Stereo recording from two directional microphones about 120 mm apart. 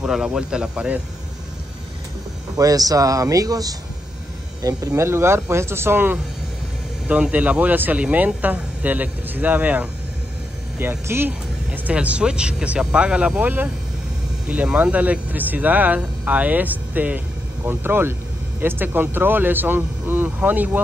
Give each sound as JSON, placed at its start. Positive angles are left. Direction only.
{"t": 0.0, "sound": "speech", "side_deg": -5}
{"t": 2.5, "sound": "speech", "side_deg": -30}